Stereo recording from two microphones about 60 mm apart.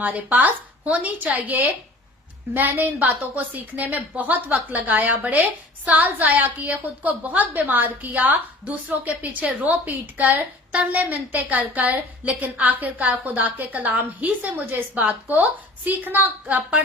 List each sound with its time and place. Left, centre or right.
0.0 s a woman's voice: right